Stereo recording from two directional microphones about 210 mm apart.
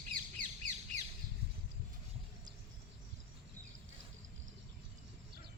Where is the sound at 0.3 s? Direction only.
35° right (ahead or behind).